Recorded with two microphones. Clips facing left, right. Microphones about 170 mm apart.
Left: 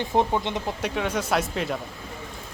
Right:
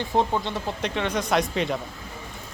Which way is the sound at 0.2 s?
15° left (ahead or behind).